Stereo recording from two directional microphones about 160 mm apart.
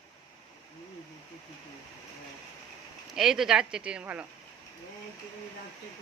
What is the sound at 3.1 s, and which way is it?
Speech, 5° right (ahead or behind).